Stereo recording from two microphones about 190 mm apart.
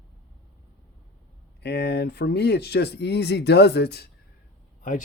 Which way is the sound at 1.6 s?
60° left (ahead or behind).